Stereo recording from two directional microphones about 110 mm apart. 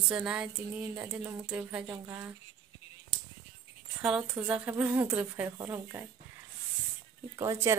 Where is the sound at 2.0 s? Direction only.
25° right (ahead or behind).